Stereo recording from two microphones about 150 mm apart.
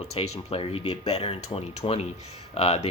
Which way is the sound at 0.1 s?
40° left (ahead or behind).